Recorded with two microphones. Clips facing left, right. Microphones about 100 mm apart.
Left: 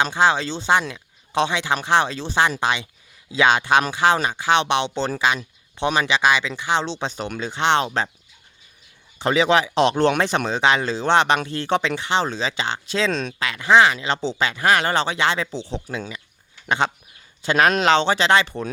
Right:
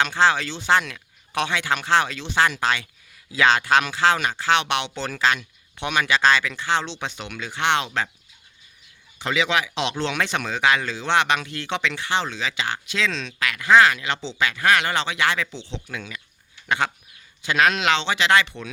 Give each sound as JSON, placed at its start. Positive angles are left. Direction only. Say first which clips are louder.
{"t": 0.0, "sound": "speech", "louder": "left 1 dB", "side_deg": 20}
{"t": 2.6, "sound": "speech", "louder": "left 1 dB", "side_deg": 20}
{"t": 4.5, "sound": "speech", "louder": "left 5 dB", "side_deg": 25}
{"t": 6.1, "sound": "speech", "louder": "even", "side_deg": 15}
{"t": 6.8, "sound": "speech", "louder": "left 5 dB", "side_deg": 35}
{"t": 9.1, "sound": "speech", "louder": "left 5 dB", "side_deg": 35}
{"t": 10.2, "sound": "speech", "louder": "left 4 dB", "side_deg": 35}
{"t": 11.9, "sound": "speech", "louder": "left 3 dB", "side_deg": 20}
{"t": 12.2, "sound": "speech", "louder": "left 3 dB", "side_deg": 35}
{"t": 13.4, "sound": "speech", "louder": "even", "side_deg": 25}
{"t": 14.4, "sound": "speech", "louder": "left 1 dB", "side_deg": 25}
{"t": 15.5, "sound": "speech", "louder": "left 6 dB", "side_deg": 40}
{"t": 15.9, "sound": "speech", "louder": "left 4 dB", "side_deg": 25}
{"t": 17.4, "sound": "speech", "louder": "left 3 dB", "side_deg": 35}